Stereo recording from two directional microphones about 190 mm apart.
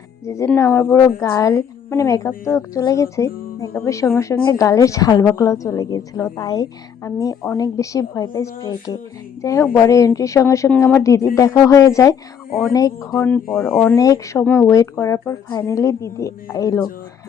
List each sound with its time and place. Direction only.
0.3 s a woman's voice: 15° left (ahead or behind)